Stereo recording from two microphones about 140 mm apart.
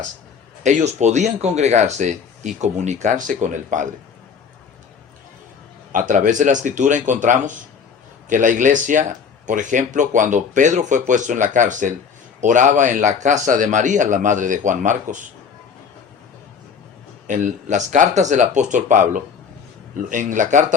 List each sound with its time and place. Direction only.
0.6 s speech: 60° right (ahead or behind)
5.9 s speech: 70° right (ahead or behind)
17.2 s speech: 65° right (ahead or behind)